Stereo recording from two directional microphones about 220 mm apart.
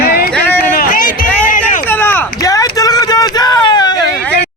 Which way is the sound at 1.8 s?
10° left (ahead or behind).